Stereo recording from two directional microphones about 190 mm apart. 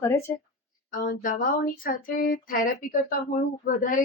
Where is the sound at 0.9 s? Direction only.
45° left (ahead or behind).